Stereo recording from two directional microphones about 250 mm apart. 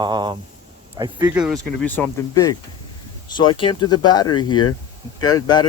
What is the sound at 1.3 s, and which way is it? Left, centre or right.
Speech, centre.